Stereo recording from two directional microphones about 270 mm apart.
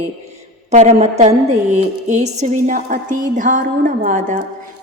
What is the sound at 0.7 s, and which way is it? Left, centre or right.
A woman's voice, right.